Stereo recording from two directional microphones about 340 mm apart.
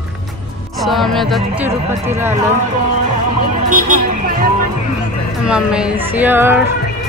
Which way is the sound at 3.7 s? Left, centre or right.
Right.